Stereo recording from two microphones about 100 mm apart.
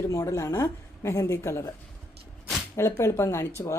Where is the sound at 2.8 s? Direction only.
30° left (ahead or behind).